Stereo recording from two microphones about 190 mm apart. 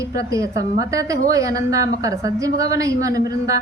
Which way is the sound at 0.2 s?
15° right (ahead or behind).